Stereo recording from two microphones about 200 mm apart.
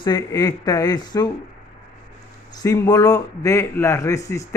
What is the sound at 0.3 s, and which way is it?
Speech, 20° left (ahead or behind).